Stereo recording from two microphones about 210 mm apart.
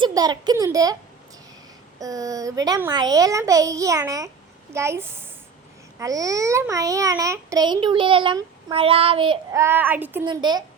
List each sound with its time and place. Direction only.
0.0 s a child's voice: 20° right (ahead or behind)
2.0 s a child's voice: 15° right (ahead or behind)
10.2 s speech: 20° right (ahead or behind)